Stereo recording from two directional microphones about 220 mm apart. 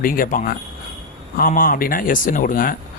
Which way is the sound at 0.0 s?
40° left (ahead or behind).